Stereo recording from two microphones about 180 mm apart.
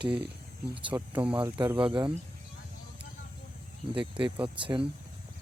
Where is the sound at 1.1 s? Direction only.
5° right (ahead or behind).